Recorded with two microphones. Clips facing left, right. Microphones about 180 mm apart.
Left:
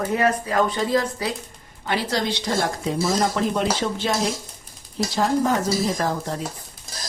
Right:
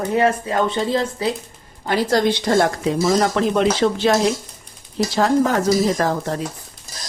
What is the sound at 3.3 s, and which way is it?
Speech, 85° right.